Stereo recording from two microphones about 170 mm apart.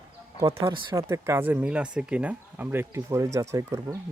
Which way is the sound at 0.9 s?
15° right (ahead or behind).